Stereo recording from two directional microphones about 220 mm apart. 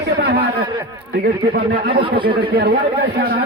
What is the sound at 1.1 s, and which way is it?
Speech, 50° right (ahead or behind).